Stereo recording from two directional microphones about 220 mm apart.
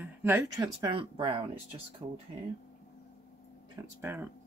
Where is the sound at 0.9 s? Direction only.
25° right (ahead or behind).